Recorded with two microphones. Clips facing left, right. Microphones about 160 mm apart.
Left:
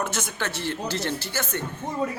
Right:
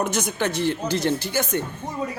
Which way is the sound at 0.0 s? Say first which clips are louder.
Right 5 dB; 15° right (ahead or behind).